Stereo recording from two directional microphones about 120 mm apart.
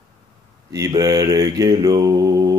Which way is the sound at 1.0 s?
30° right (ahead or behind).